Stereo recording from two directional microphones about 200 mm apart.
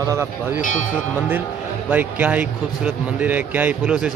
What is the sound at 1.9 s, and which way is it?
Speech, 10° right (ahead or behind).